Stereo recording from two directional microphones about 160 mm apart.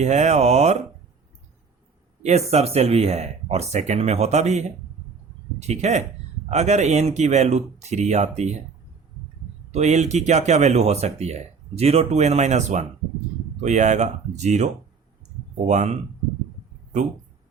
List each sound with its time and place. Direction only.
0.0 s speech: 45° right (ahead or behind)
2.2 s speech: 40° right (ahead or behind)
9.7 s speech: 45° right (ahead or behind)